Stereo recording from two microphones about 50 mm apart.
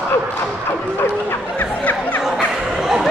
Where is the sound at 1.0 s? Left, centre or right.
Left.